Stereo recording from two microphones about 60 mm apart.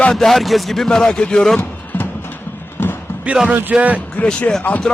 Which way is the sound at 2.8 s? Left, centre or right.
Left.